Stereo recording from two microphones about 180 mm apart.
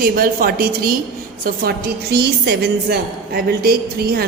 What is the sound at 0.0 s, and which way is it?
A woman's voice, 55° right (ahead or behind).